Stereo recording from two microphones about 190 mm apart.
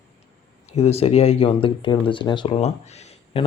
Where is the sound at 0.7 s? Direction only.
35° left (ahead or behind).